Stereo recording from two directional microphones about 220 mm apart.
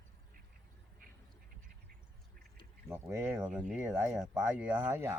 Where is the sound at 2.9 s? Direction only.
10° right (ahead or behind).